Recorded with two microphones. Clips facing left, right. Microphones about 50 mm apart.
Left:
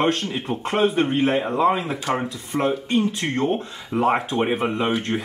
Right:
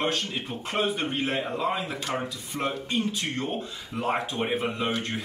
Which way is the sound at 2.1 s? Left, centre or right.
Left.